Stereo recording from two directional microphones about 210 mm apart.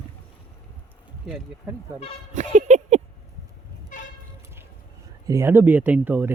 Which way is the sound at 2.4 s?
35° right (ahead or behind).